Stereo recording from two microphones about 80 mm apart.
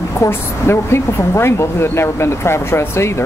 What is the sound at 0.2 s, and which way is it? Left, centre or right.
Speech, left.